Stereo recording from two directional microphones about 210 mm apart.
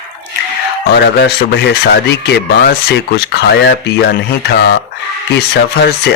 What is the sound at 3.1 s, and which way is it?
Speech, 50° left (ahead or behind).